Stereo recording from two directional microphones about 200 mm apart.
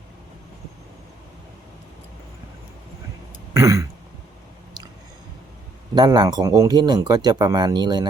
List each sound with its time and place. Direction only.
3.5 s throat clearing: 15° right (ahead or behind)
5.9 s speech: 20° right (ahead or behind)